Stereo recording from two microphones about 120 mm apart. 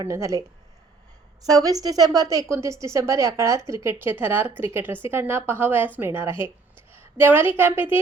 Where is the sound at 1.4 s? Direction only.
30° right (ahead or behind).